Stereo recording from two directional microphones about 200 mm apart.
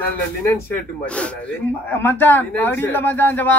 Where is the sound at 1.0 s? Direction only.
5° left (ahead or behind).